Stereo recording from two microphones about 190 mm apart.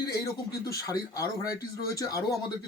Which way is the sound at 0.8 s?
15° left (ahead or behind).